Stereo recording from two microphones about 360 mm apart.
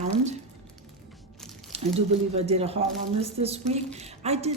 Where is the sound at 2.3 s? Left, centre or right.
Centre.